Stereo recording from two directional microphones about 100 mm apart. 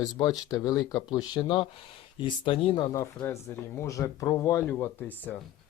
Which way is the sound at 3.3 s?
30° left (ahead or behind).